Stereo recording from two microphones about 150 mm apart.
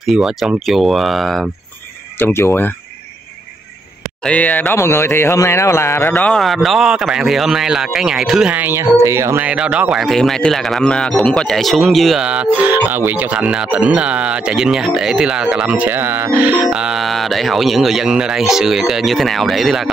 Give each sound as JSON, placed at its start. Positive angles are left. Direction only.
{"t": 0.0, "sound": "speech", "side_deg": -5}
{"t": 2.1, "sound": "speech", "side_deg": 15}
{"t": 4.2, "sound": "speech", "side_deg": 10}
{"t": 9.5, "sound": "speech", "side_deg": -5}